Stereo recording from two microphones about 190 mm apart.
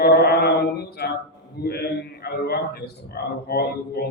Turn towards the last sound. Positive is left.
turn(degrees=55)  # may be behind; listen again after turning